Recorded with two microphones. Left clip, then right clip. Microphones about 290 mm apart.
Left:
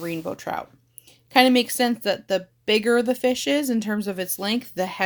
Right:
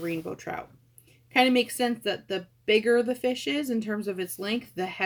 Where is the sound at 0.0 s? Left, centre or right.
Left.